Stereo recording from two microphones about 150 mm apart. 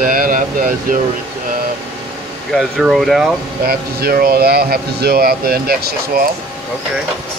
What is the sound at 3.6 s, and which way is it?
Speech, 80° right.